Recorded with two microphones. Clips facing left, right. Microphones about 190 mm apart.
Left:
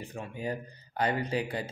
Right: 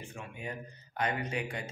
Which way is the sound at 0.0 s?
35° left (ahead or behind).